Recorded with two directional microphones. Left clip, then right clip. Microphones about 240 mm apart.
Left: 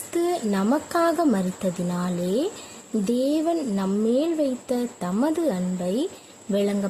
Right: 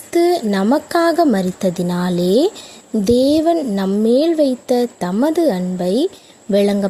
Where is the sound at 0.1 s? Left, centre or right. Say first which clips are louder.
Right 9 dB; right.